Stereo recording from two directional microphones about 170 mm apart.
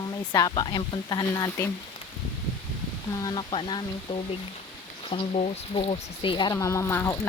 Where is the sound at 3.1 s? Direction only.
25° left (ahead or behind).